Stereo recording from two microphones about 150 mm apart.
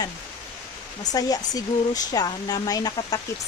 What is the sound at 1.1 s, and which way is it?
Speech, 25° left (ahead or behind).